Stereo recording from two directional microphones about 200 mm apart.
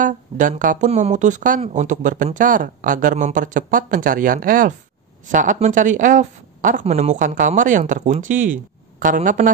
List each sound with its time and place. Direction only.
0.0 s speech: 40° right (ahead or behind)